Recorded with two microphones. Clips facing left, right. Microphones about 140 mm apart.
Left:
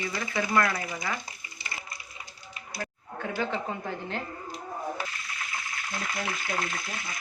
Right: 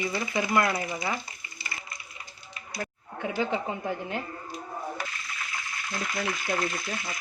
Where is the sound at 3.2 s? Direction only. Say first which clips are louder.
Right 2 dB; 15° right (ahead or behind).